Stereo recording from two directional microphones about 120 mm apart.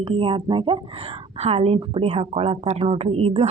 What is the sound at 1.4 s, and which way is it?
A woman's voice, 60° right (ahead or behind).